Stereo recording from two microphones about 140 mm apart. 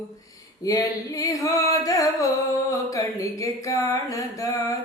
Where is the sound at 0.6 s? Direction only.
25° left (ahead or behind).